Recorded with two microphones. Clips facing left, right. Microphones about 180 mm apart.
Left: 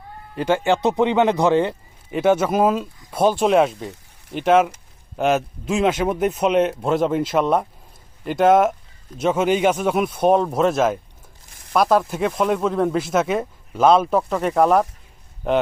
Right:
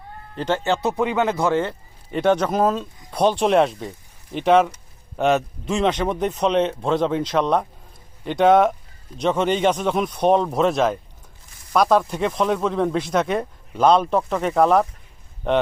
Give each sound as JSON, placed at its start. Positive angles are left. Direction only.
{"t": 0.3, "sound": "speech", "side_deg": 10}
{"t": 2.0, "sound": "speech", "side_deg": 5}